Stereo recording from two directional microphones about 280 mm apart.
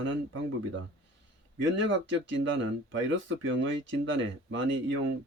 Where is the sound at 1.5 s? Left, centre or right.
Right.